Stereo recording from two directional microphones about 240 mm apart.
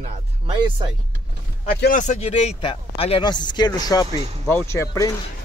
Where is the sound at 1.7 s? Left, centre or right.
Left.